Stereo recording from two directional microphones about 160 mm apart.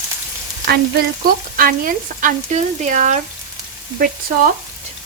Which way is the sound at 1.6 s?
60° right (ahead or behind).